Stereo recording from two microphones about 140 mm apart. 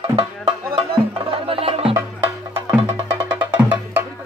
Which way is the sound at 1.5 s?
45° right (ahead or behind).